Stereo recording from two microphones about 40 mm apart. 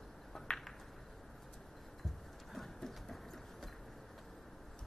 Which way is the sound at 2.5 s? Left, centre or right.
Centre.